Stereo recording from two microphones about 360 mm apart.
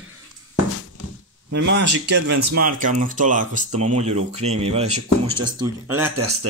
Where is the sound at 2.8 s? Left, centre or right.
Right.